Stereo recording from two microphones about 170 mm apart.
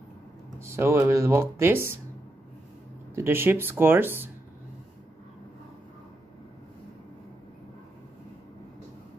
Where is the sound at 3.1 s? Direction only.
15° right (ahead or behind).